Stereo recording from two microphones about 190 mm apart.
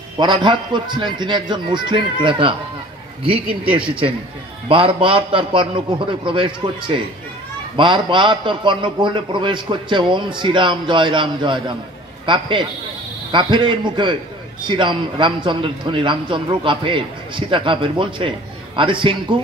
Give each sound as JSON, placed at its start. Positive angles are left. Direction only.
{"t": 0.2, "sound": "a man's voice", "side_deg": -25}
{"t": 4.6, "sound": "a man's voice", "side_deg": -30}